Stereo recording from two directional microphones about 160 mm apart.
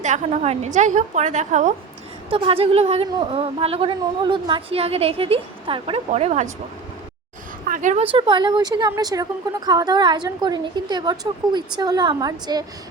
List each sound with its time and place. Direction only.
0.0 s a woman's voice: 50° right (ahead or behind)
2.3 s a woman's voice: 35° right (ahead or behind)
7.7 s a woman's voice: 50° right (ahead or behind)
8.1 s a woman's voice: 30° right (ahead or behind)